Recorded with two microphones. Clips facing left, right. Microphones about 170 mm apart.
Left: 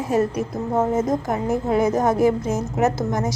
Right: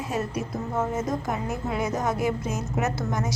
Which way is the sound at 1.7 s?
45° left (ahead or behind).